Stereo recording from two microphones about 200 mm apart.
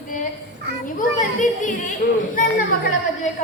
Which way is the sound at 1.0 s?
40° left (ahead or behind).